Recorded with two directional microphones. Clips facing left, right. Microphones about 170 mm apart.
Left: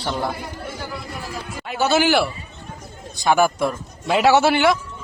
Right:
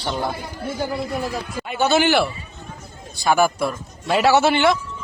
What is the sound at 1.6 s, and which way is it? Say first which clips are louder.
Speech: even; 5° left (ahead or behind).